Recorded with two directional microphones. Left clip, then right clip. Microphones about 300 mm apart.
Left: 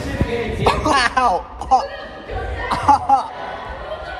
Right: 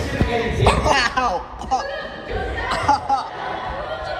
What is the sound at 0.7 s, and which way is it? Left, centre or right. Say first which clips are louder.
Speech: left 2 dB; centre.